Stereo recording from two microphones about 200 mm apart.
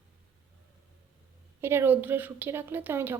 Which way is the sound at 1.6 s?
10° right (ahead or behind).